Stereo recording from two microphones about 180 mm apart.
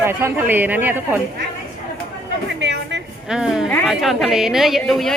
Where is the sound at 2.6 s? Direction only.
75° right (ahead or behind).